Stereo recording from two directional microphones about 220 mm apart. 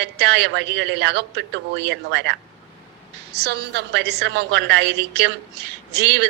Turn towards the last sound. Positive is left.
turn(degrees=-50)  # may be behind; listen again after turning